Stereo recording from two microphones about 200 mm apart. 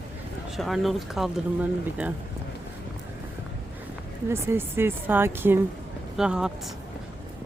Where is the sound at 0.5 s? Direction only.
Centre (ahead or behind).